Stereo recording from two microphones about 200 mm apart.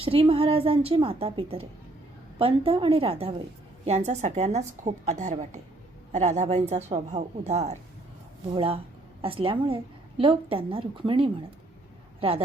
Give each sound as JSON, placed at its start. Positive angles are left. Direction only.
{"t": 0.0, "sound": "a woman's voice", "side_deg": -30}